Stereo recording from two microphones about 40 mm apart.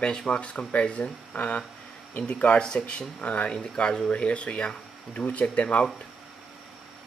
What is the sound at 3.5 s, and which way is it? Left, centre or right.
Speech, left.